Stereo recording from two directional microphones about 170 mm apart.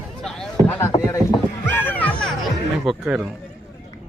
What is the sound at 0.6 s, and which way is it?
Speech, 15° left (ahead or behind).